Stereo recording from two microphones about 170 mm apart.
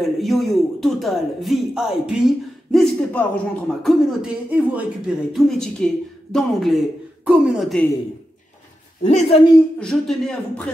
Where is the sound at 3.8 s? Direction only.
10° right (ahead or behind).